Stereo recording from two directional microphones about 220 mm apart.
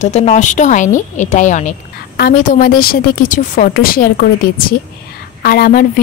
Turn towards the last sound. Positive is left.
turn(degrees=40)  # may be behind; listen again after turning